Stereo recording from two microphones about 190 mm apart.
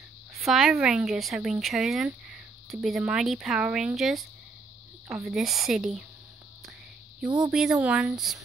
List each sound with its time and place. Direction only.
0.4 s speech: centre (ahead or behind)
7.2 s speech: 5° right (ahead or behind)